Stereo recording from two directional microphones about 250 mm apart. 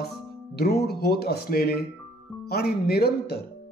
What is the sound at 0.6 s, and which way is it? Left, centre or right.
Speech, left.